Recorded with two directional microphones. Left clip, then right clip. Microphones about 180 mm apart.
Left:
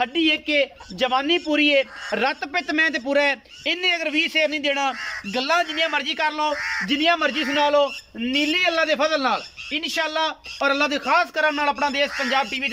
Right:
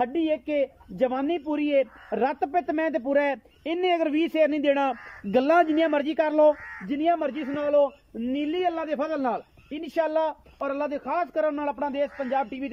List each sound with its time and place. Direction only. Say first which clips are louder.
0.0 s a man's voice: left 5 dB; 40° right (ahead or behind)
6.9 s a man's voice: left 3 dB; 35° right (ahead or behind)
10.6 s a man's voice: left 8 dB; 30° right (ahead or behind)